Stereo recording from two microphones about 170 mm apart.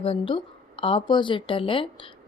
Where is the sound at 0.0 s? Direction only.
30° left (ahead or behind).